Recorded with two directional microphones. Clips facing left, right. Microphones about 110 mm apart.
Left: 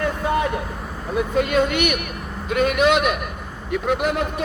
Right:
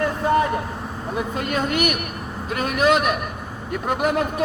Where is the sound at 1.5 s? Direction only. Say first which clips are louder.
Left 2 dB; 40° right (ahead or behind).